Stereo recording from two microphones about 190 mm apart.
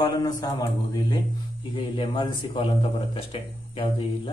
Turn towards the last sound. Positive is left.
turn(degrees=25)  # may be behind; listen again after turning